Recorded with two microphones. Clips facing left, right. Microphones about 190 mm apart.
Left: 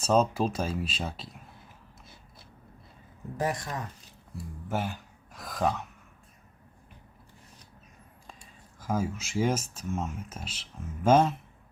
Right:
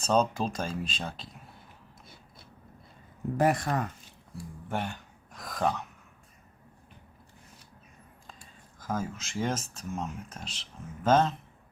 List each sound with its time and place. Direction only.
0.0 s speech: 5° left (ahead or behind)
3.3 s speech: 60° right (ahead or behind)
4.7 s speech: centre (ahead or behind)
8.8 s speech: 10° left (ahead or behind)